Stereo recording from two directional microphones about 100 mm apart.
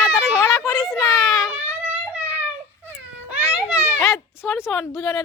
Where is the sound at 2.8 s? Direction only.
15° right (ahead or behind).